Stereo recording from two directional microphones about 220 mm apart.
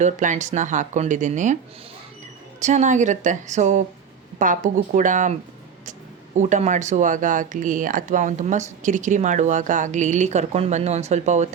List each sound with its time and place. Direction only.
0.0 s speech: 35° right (ahead or behind)
2.6 s speech: 30° right (ahead or behind)